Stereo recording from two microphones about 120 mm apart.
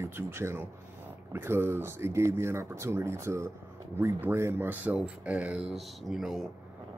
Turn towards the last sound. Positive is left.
turn(degrees=-5)  # may be behind; listen again after turning